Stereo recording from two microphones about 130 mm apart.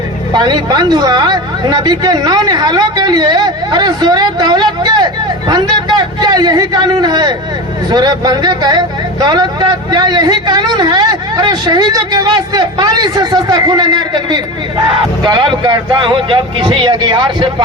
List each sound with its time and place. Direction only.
0.3 s a man's voice: 35° right (ahead or behind)